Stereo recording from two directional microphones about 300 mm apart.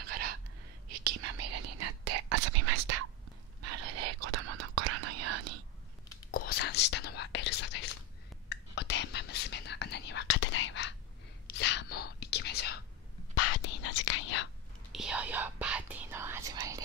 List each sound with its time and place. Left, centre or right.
0.8 s whispering: right
6.3 s whispering: left
13.3 s whispering: left
14.9 s whispering: centre